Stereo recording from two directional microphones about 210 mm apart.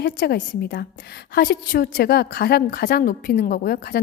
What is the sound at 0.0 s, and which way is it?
A woman's voice, 50° left (ahead or behind).